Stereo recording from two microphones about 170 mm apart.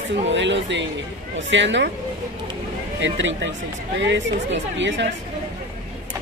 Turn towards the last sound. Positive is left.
turn(degrees=-90)